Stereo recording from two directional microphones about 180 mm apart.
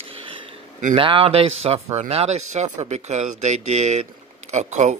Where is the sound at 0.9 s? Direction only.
30° right (ahead or behind).